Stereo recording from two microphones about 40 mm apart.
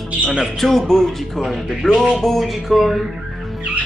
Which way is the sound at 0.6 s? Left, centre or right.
Centre.